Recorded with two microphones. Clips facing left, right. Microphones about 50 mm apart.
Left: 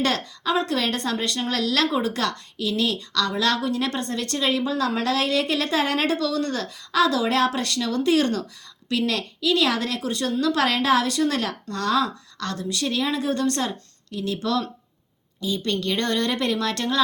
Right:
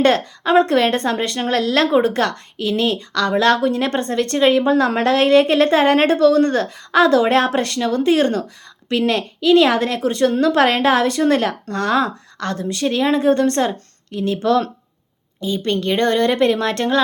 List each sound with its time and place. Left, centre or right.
0.0 s speech: right